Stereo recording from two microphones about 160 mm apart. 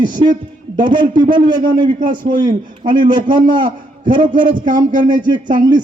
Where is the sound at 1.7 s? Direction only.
30° right (ahead or behind).